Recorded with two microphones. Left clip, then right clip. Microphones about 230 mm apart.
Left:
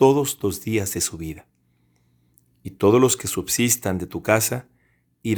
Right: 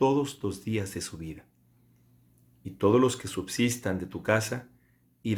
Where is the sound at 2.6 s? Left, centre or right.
Left.